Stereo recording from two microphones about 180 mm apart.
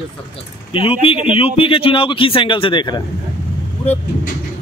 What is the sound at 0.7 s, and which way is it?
A man's voice, 30° left (ahead or behind).